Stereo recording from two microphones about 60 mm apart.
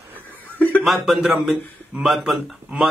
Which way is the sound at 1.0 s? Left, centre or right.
Centre.